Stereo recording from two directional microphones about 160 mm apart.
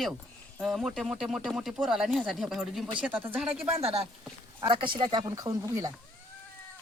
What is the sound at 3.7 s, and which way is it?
Speech, 40° right (ahead or behind).